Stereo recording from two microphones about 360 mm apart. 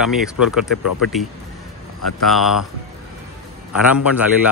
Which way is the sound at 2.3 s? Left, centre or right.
Centre.